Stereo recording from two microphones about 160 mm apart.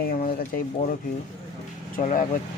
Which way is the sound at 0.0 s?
65° left (ahead or behind).